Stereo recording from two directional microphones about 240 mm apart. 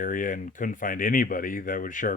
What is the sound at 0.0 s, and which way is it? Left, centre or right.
Speech, left.